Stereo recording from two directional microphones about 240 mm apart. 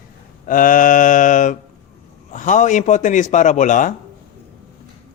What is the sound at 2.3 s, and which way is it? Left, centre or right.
Speech, left.